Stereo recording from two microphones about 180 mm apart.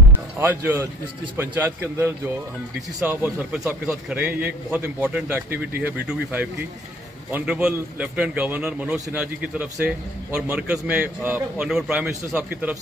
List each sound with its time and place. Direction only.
0.4 s a man's voice: 15° right (ahead or behind)